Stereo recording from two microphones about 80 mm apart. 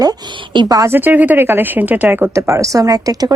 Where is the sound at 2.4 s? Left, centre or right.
Right.